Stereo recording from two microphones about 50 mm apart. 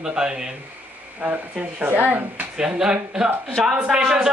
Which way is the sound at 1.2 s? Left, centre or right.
Right.